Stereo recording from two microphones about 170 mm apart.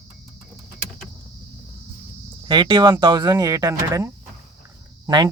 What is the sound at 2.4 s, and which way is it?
Speech, 25° right (ahead or behind).